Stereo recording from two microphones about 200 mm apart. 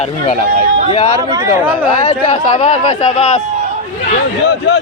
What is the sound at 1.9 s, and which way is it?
Speech, 35° left (ahead or behind).